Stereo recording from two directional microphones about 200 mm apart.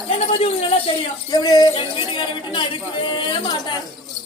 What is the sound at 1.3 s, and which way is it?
Speech, 20° left (ahead or behind).